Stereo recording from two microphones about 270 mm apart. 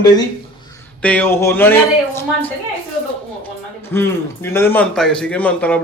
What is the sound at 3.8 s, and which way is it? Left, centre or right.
A man's voice, centre.